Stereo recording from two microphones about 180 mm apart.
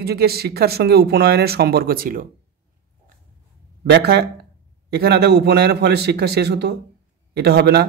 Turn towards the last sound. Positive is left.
turn(degrees=-65)  # may be behind; listen again after turning